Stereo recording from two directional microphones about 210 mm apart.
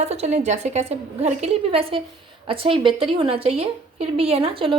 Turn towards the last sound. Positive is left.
turn(degrees=-25)  # may be behind; listen again after turning